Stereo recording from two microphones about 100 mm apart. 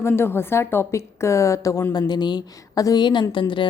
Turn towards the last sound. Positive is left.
turn(degrees=55)  # may be behind; listen again after turning